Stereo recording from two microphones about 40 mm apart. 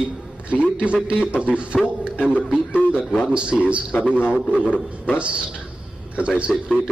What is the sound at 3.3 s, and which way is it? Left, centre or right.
Speech, right.